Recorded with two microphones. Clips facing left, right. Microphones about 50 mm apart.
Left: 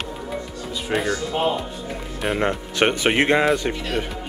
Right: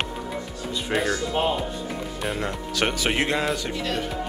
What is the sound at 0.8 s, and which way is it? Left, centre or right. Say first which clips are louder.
Speech: left 2 dB; centre.